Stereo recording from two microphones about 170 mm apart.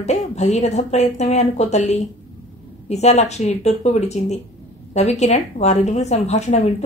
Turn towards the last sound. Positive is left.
turn(degrees=40)  # may be behind; listen again after turning